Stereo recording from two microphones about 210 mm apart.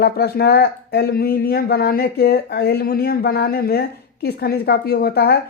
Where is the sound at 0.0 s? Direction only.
50° left (ahead or behind).